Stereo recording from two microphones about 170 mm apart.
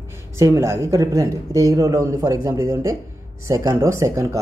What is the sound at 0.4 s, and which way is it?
Speech, 15° right (ahead or behind).